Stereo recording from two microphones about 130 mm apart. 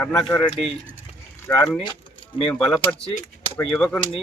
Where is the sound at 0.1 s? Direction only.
5° left (ahead or behind).